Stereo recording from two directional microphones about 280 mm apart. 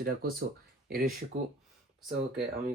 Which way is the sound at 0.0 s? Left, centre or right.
Right.